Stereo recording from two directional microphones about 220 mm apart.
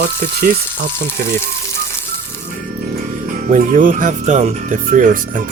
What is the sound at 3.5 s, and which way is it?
Speech, 40° right (ahead or behind).